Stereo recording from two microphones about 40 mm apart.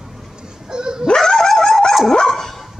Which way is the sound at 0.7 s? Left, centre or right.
Centre.